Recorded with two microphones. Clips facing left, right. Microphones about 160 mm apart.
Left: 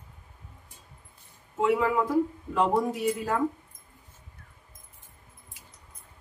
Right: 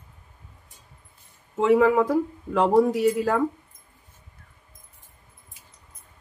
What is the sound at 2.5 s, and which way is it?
Speech, 85° right.